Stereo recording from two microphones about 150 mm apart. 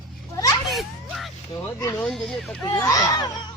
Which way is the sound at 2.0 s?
5° left (ahead or behind).